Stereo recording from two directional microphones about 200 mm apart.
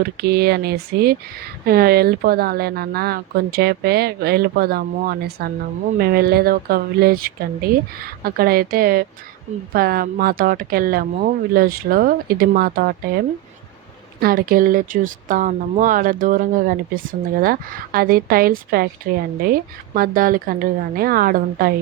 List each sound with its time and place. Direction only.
0.0 s speech: 50° right (ahead or behind)
14.2 s speech: 45° right (ahead or behind)